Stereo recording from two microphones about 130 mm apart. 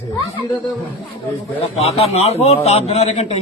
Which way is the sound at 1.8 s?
50° left (ahead or behind).